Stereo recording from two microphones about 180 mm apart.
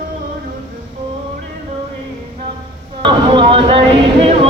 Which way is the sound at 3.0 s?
25° right (ahead or behind).